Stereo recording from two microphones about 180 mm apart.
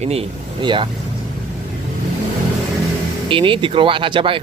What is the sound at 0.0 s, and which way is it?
Speech, 35° right (ahead or behind).